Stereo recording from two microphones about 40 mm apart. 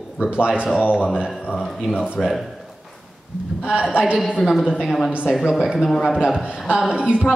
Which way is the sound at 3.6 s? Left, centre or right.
Right.